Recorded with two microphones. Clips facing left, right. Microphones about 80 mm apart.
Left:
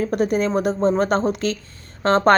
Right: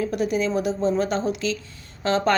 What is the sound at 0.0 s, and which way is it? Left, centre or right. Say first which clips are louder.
Speech: left 3 dB; left.